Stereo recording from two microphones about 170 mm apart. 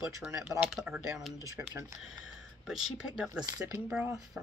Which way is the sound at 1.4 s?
20° right (ahead or behind).